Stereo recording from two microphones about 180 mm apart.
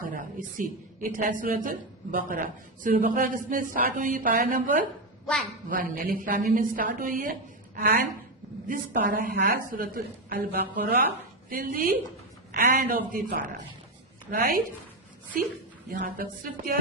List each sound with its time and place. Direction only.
0.6 s a woman's voice: 50° right (ahead or behind)
5.2 s a woman's voice: centre (ahead or behind)
5.7 s a woman's voice: 50° right (ahead or behind)
7.8 s a woman's voice: 60° right (ahead or behind)
8.6 s a woman's voice: 50° right (ahead or behind)
16.0 s a woman's voice: 50° right (ahead or behind)